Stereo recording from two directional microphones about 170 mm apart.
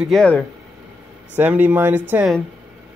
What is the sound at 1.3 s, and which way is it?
Speech, 10° right (ahead or behind).